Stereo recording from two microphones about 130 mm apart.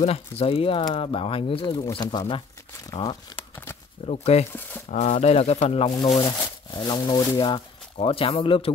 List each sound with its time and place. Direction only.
0.0 s speech: 50° left (ahead or behind); by 3.3 s 35° left (ahead or behind)
3.3 s a sound: 15° left (ahead or behind)
4.0 s a sound: 50° left (ahead or behind)
4.5 s speech: 15° left (ahead or behind)
4.9 s speech: 60° left (ahead or behind)
6.2 s speech: 30° left (ahead or behind)